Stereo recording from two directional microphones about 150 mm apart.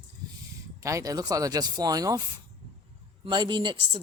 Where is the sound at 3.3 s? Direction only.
30° right (ahead or behind).